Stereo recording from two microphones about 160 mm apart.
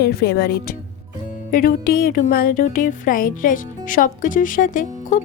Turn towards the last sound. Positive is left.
turn(degrees=55)  # may be behind; listen again after turning